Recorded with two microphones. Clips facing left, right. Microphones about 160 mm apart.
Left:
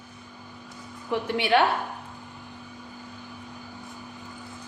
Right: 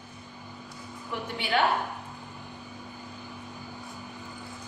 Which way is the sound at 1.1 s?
75° left (ahead or behind).